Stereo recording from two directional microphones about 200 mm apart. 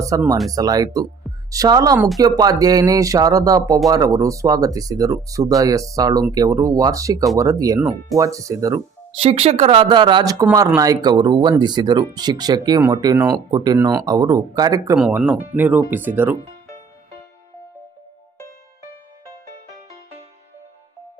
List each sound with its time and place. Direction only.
0.0 s speech: 15° right (ahead or behind)
9.2 s speech: 30° right (ahead or behind)
14.9 s speech: 5° right (ahead or behind)